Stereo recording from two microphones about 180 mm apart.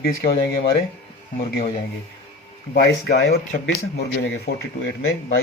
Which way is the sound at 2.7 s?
65° left (ahead or behind).